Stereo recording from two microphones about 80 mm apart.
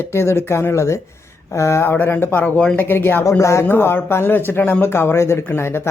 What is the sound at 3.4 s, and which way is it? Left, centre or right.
Speech, left.